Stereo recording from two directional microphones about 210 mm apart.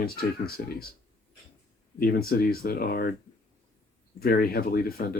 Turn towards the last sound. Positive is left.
turn(degrees=45)  # may be behind; listen again after turning